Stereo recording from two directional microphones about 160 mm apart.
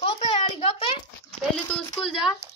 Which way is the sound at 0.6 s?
35° left (ahead or behind).